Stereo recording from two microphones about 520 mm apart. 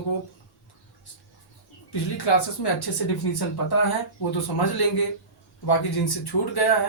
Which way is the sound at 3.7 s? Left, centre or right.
Left.